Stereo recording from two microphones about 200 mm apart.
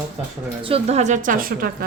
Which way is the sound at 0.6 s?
30° right (ahead or behind).